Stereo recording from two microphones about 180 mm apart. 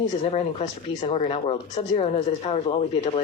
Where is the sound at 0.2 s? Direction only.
35° left (ahead or behind).